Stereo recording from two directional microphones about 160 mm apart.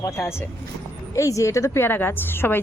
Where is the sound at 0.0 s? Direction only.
15° left (ahead or behind).